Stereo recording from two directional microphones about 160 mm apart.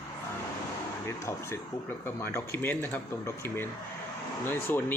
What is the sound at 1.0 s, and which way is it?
Speech, 15° left (ahead or behind).